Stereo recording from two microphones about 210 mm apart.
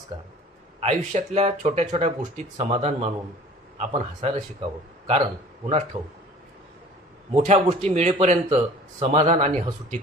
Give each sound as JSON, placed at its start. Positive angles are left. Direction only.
{"t": 0.8, "sound": "a man's voice", "side_deg": -30}
{"t": 7.3, "sound": "speech", "side_deg": -30}